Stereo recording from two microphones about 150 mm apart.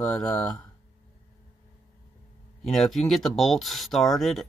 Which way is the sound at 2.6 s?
Centre (ahead or behind).